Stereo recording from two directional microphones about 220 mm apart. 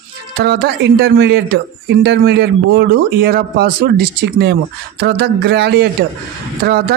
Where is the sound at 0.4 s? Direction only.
45° right (ahead or behind).